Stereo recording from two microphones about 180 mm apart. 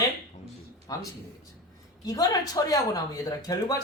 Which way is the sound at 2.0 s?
20° left (ahead or behind).